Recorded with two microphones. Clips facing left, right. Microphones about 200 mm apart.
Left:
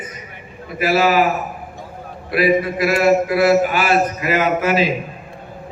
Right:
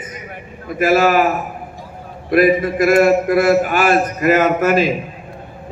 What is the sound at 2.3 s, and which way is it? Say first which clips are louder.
A man's voice: right 3 dB; 50° right (ahead or behind).